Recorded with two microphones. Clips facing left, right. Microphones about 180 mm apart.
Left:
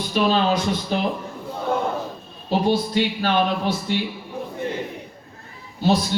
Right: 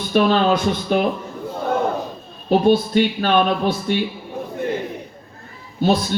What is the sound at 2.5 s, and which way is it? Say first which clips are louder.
Speech: right 5 dB; 55° right (ahead or behind).